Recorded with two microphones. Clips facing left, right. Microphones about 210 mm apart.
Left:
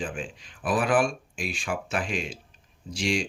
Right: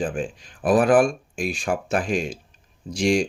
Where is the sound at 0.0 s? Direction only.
45° right (ahead or behind).